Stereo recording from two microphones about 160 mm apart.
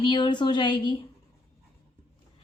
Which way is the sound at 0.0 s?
30° left (ahead or behind).